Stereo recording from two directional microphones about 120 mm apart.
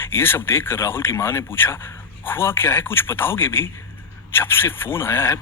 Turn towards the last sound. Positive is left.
turn(degrees=20)  # may be behind; listen again after turning